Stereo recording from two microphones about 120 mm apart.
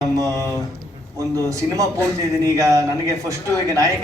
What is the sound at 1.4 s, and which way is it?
A man's voice, 30° right (ahead or behind).